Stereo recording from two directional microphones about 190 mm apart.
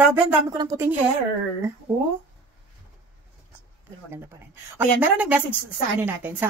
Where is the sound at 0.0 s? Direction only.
10° right (ahead or behind).